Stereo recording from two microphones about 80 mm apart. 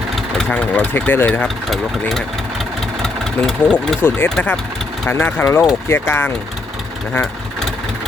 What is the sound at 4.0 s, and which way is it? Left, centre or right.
Speech, left.